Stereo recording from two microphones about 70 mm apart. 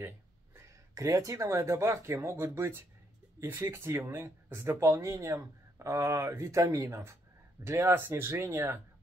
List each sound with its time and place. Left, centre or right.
0.6 s speech: right
4.6 s speech: right